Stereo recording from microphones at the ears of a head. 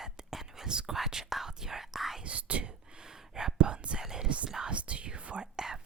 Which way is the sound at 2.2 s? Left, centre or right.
Right.